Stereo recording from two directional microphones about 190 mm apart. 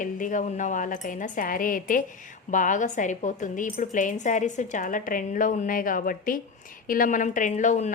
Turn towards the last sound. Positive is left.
turn(degrees=40)  # may be behind; listen again after turning